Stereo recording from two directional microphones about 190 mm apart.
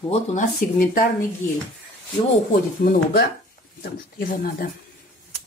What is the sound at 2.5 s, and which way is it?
Speech, 50° left (ahead or behind).